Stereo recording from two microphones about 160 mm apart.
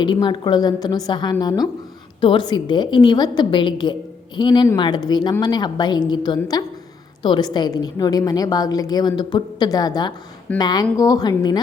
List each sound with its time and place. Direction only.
0.0 s a woman's voice: 30° left (ahead or behind)